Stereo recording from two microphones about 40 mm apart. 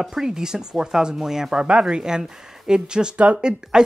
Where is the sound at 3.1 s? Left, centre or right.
Right.